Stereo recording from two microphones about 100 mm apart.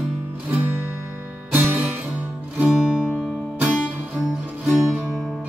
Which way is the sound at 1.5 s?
20° right (ahead or behind).